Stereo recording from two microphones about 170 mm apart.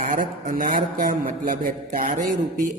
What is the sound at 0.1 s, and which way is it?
Speech, 55° right (ahead or behind).